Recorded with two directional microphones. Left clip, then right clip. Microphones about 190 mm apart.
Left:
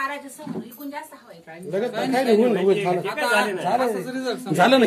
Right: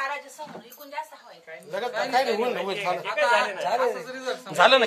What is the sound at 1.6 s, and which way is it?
Speech, 30° right (ahead or behind).